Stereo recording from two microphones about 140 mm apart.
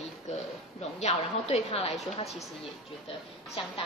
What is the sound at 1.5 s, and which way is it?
Speech, 45° left (ahead or behind).